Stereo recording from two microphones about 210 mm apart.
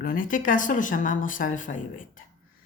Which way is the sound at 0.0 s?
40° left (ahead or behind).